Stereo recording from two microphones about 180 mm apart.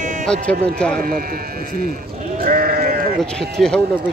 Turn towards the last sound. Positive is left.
turn(degrees=5)  # may be behind; listen again after turning